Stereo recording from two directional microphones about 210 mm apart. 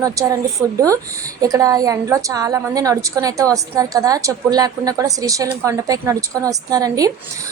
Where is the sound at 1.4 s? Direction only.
15° right (ahead or behind).